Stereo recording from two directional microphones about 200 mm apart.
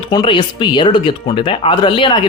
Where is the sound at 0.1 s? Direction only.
20° left (ahead or behind).